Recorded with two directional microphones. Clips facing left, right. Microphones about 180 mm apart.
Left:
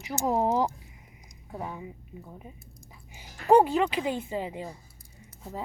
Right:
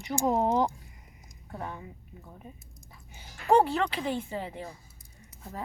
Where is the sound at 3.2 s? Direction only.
15° left (ahead or behind).